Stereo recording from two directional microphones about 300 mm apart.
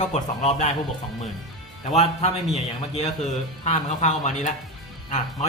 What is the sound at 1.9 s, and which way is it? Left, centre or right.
A man's voice, left.